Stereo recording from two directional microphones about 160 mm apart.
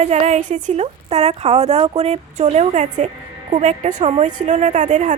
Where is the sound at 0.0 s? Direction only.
45° right (ahead or behind).